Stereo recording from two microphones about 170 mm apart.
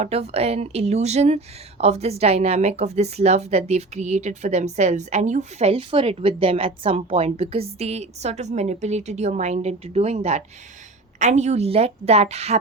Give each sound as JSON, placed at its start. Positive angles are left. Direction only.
{"t": 0.0, "sound": "a woman's voice", "side_deg": -40}